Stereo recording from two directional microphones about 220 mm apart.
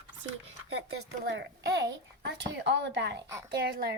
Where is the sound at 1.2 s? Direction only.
50° right (ahead or behind).